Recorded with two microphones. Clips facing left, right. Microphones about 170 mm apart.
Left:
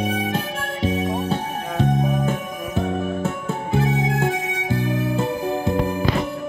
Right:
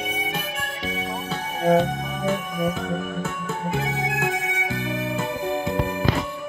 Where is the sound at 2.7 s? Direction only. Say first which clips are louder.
Left 4 dB; 30° left (ahead or behind).